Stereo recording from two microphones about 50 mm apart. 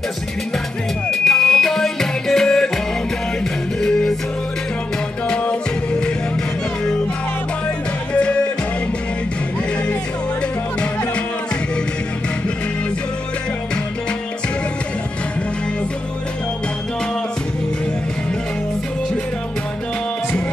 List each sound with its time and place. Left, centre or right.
1.1 s music: centre
5.3 s music: left
8.1 s music: left